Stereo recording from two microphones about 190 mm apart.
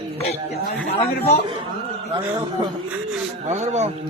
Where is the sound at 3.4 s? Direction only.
35° right (ahead or behind).